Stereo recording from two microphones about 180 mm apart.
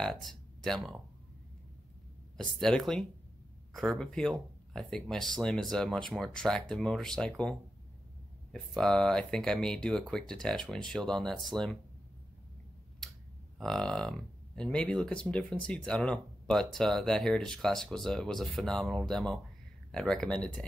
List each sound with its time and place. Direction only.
0.0 s speech: centre (ahead or behind)
2.3 s speech: centre (ahead or behind)
13.0 s a sound: 5° left (ahead or behind)
13.6 s speech: 5° left (ahead or behind)